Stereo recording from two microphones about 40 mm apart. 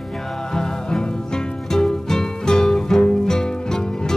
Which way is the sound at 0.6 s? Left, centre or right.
Centre.